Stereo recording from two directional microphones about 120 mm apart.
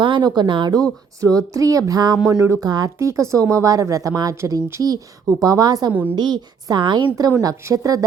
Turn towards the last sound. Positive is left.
turn(degrees=-30)  # may be behind; listen again after turning